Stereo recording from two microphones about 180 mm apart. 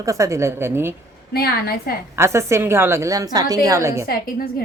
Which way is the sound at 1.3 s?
60° left (ahead or behind).